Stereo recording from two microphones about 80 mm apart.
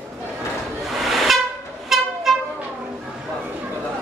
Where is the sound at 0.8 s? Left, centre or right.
Centre.